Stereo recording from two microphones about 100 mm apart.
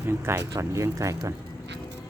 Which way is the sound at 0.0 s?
25° right (ahead or behind).